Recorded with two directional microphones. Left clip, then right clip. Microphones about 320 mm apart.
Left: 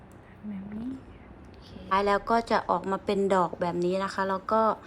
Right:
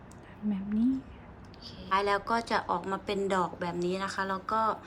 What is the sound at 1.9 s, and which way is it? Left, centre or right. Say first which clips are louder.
A woman's voice: left 3 dB; centre.